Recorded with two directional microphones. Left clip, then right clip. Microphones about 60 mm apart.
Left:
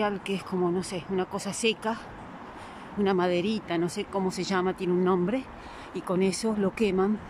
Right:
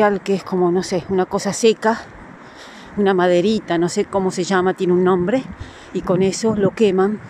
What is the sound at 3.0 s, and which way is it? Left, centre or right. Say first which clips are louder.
Speech: right 11 dB; right.